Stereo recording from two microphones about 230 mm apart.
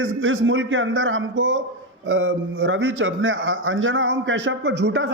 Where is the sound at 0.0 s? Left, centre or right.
Right.